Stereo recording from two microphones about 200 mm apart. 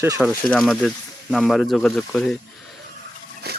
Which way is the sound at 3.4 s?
55° right (ahead or behind).